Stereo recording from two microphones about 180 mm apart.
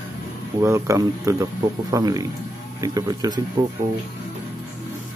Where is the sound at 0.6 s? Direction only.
15° right (ahead or behind).